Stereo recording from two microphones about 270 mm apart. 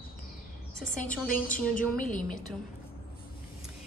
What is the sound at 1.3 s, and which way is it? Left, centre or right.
Speech, left.